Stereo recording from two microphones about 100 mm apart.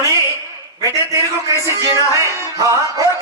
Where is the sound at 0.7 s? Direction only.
30° right (ahead or behind).